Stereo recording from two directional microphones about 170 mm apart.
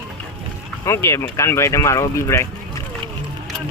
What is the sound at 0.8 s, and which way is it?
Speech, 15° left (ahead or behind).